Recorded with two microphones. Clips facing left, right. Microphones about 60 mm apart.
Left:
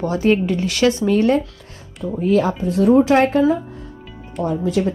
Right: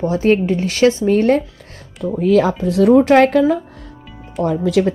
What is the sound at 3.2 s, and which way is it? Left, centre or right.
Speech, right.